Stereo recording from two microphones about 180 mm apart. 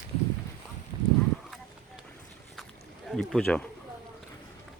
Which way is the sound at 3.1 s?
Centre (ahead or behind).